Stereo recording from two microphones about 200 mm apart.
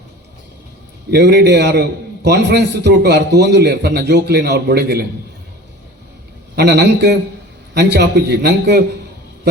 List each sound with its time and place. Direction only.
1.1 s a man's voice: 55° right (ahead or behind)
6.6 s a man's voice: 55° right (ahead or behind)